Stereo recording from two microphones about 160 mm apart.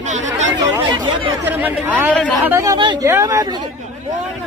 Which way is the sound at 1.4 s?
10° right (ahead or behind).